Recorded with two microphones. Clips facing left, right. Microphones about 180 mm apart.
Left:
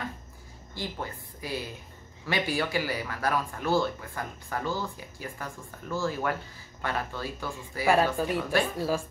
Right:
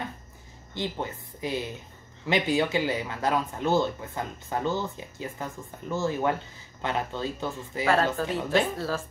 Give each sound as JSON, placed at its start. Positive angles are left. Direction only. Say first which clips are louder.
{"t": 0.7, "sound": "speech", "louder": "right 4 dB", "side_deg": -20}
{"t": 7.8, "sound": "speech", "louder": "left 1 dB", "side_deg": 15}